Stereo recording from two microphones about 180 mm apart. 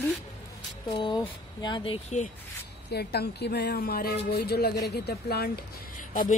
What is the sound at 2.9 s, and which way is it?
Speech, 65° left (ahead or behind).